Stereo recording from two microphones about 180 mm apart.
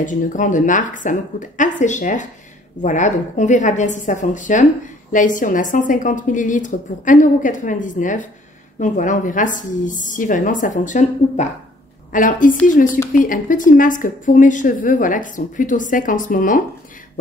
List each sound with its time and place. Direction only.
0.0 s a woman's voice: 45° left (ahead or behind)